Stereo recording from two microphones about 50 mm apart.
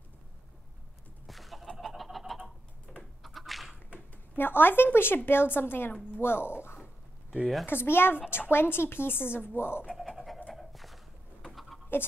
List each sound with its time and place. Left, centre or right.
1.2 s fowl: centre
2.9 s typing: centre
3.3 s a sound: centre
3.9 s speech: left
7.6 s speech: left
10.0 s pant: centre
10.5 s dog: centre
11.9 s a woman's voice: left